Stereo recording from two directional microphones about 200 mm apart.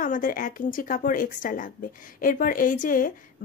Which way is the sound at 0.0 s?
40° left (ahead or behind).